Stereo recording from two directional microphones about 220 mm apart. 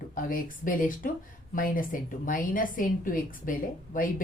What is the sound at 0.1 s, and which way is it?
A woman's voice, 40° left (ahead or behind).